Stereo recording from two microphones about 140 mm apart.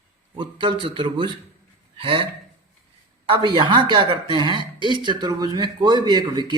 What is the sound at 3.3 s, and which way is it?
A man's voice, 35° right (ahead or behind).